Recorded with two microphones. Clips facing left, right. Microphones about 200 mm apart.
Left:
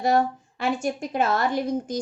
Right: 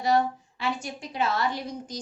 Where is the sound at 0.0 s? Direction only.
50° left (ahead or behind).